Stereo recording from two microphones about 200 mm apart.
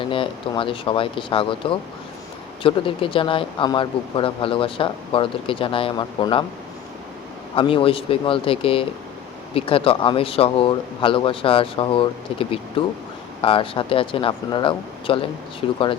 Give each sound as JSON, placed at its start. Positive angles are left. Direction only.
{"t": 0.0, "sound": "speech", "side_deg": 25}
{"t": 7.5, "sound": "speech", "side_deg": 25}